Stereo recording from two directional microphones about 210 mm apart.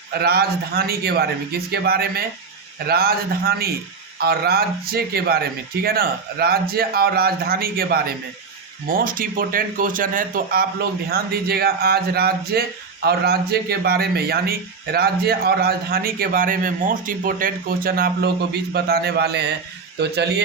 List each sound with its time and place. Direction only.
0.1 s speech: 50° right (ahead or behind)